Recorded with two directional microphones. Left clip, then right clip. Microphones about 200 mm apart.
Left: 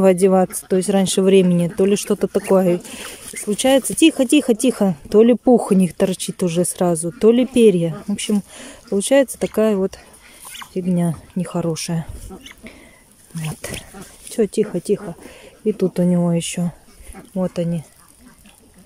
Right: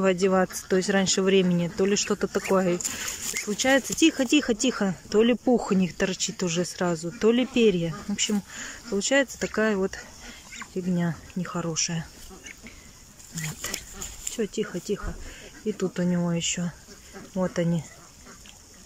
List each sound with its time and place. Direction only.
0.0 s speech: 20° left (ahead or behind)
14.3 s speech: 25° left (ahead or behind)
17.4 s speech: 10° left (ahead or behind)